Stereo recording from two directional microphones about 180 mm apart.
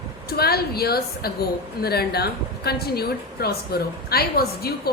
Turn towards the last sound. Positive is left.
turn(degrees=60)  # may be behind; listen again after turning